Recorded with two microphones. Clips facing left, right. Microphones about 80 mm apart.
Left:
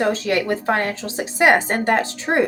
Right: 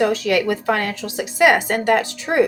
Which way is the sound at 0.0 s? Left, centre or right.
Left.